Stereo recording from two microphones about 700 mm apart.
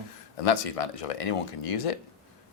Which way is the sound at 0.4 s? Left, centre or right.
Left.